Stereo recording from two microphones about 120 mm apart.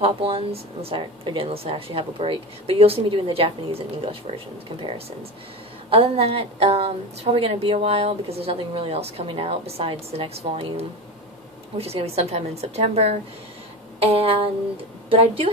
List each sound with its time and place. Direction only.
0.0 s speech: 50° right (ahead or behind)